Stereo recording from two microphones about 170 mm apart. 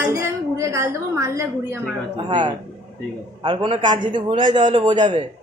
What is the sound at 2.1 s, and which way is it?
Speech, 30° right (ahead or behind).